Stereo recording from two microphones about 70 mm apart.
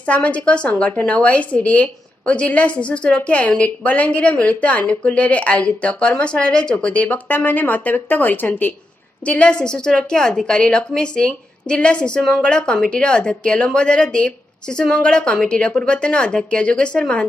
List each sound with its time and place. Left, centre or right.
0.0 s a woman's voice: centre
9.2 s a woman's voice: centre